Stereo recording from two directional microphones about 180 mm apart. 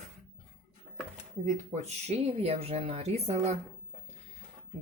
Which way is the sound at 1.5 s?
40° right (ahead or behind).